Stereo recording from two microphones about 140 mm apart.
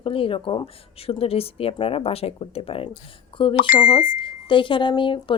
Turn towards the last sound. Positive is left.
turn(degrees=35)  # may be behind; listen again after turning